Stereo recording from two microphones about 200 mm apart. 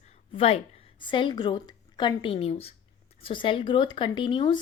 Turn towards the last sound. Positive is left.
turn(degrees=25)  # may be behind; listen again after turning